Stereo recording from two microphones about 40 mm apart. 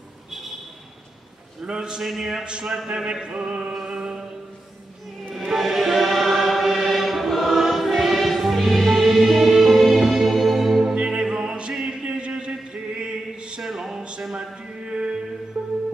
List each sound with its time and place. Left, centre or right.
0.3 s a sound: centre
1.6 s a man's voice: centre
2.0 s speech: centre
2.4 s chant: right
3.8 s music: centre
5.3 s music: centre
11.0 s music: right
11.7 s chant: centre
13.6 s music: centre
14.9 s music: right